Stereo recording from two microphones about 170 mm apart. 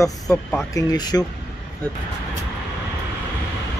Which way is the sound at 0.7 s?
20° left (ahead or behind).